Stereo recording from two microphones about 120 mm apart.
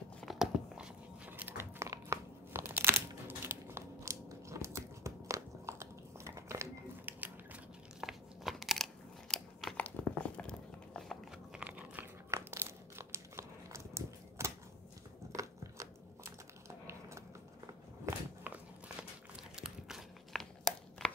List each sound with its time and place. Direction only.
0.2 s biting: 5° right (ahead or behind)
8.0 s crunch: 5° right (ahead or behind)
10.3 s biting: 10° left (ahead or behind)
11.6 s biting: 15° right (ahead or behind)
12.3 s crumpling: 20° right (ahead or behind)
15.3 s biting: 25° right (ahead or behind)
18.0 s a sound: 15° right (ahead or behind)
19.3 s a sound: 5° right (ahead or behind)